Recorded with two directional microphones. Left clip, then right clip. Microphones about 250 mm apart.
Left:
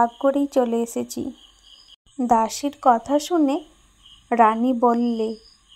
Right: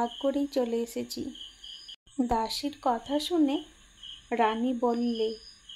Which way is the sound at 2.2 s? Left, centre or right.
Centre.